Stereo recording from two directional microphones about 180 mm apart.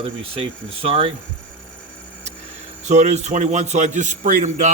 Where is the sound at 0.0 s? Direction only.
30° right (ahead or behind).